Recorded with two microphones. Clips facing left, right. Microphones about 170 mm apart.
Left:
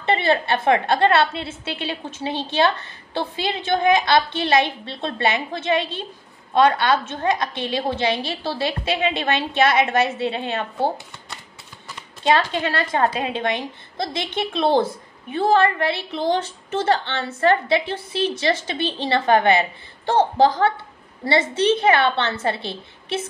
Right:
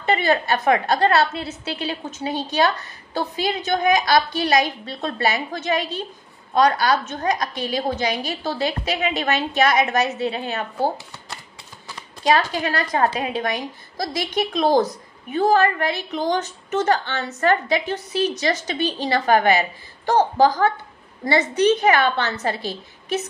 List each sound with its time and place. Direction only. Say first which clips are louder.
0.0 s a woman's voice: even; 25° left (ahead or behind)
12.2 s a woman's voice: even; 30° left (ahead or behind)